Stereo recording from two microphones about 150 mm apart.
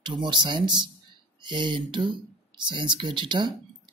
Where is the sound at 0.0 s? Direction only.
30° right (ahead or behind).